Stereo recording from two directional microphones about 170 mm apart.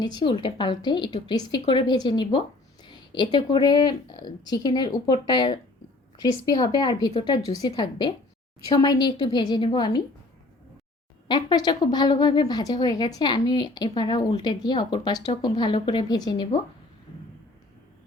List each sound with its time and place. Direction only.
0.0 s a woman's voice: 25° left (ahead or behind)
7.4 s speech: 20° left (ahead or behind)
11.3 s speech: 25° left (ahead or behind)